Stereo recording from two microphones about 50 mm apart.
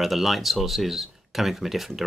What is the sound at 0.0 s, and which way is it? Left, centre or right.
Speech, centre.